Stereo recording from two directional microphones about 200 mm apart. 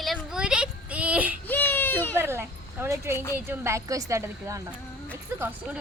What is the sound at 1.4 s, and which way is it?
Baby cry, 10° left (ahead or behind).